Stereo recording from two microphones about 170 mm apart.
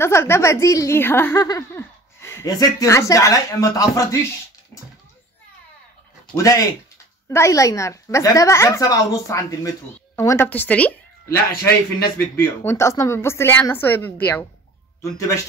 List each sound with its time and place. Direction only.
0.0 s speech: 15° left (ahead or behind)
6.3 s a woman's voice: 20° left (ahead or behind)